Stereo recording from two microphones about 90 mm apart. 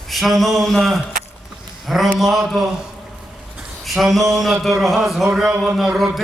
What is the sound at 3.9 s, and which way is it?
A man's voice, centre (ahead or behind).